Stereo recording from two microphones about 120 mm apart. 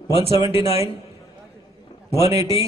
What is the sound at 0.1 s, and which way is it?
Speech, 50° left (ahead or behind).